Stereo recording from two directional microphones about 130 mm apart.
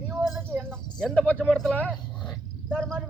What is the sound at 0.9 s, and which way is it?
Speech, 5° left (ahead or behind).